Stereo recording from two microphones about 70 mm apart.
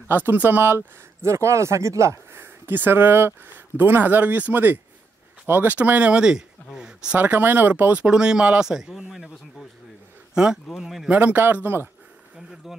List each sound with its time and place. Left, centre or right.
0.1 s speech: right; by 7.2 s centre
7.2 s speech: right; by 11.1 s centre
11.1 s speech: right
12.4 s a sound: centre